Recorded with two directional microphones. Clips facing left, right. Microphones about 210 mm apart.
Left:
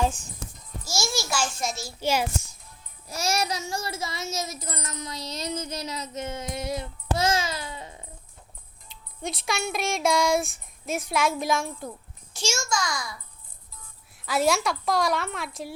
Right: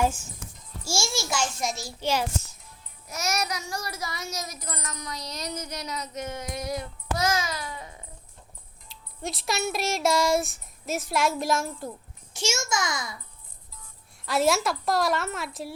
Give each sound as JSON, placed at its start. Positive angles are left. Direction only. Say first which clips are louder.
{"t": 0.4, "sound": "a sound", "louder": "left 6 dB", "side_deg": 30}
{"t": 0.9, "sound": "a child's voice", "louder": "even", "side_deg": -25}
{"t": 2.0, "sound": "a child's voice", "louder": "left 2 dB", "side_deg": 10}
{"t": 3.1, "sound": "child singing", "louder": "left 2 dB", "side_deg": 30}
{"t": 8.9, "sound": "speech", "louder": "left 1 dB", "side_deg": 0}
{"t": 12.3, "sound": "a child's voice", "louder": "even", "side_deg": -20}
{"t": 14.3, "sound": "speech", "louder": "even", "side_deg": 0}